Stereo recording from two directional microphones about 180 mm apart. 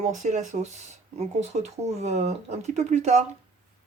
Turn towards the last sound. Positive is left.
turn(degrees=-40)  # may be behind; listen again after turning